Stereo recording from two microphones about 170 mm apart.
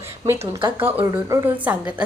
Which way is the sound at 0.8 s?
15° right (ahead or behind).